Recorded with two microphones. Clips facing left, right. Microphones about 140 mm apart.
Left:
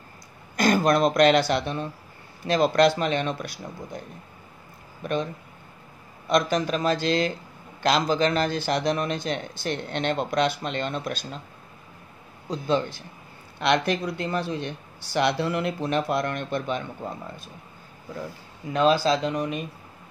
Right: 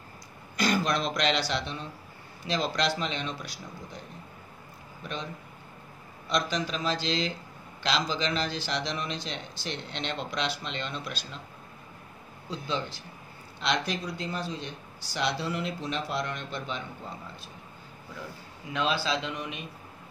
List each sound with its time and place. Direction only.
0.6 s a man's voice: 50° left (ahead or behind)
5.0 s a man's voice: 50° left (ahead or behind)
6.2 s a man's voice: 50° left (ahead or behind)
12.4 s a man's voice: 50° left (ahead or behind)
18.7 s speech: 40° left (ahead or behind)